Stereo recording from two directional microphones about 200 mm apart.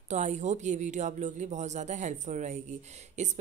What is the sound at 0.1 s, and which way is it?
Speech, 35° right (ahead or behind).